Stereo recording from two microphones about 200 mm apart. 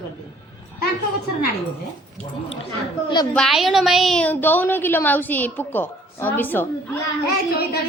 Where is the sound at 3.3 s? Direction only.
Centre (ahead or behind).